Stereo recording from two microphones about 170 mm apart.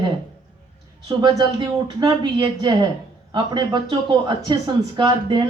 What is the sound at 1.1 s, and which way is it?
Speech, 25° right (ahead or behind).